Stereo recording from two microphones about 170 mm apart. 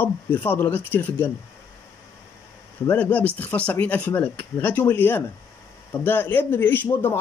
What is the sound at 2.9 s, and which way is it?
Speech, 10° left (ahead or behind).